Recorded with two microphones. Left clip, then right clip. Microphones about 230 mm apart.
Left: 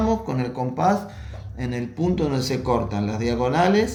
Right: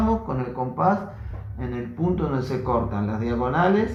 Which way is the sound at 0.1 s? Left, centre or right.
Left.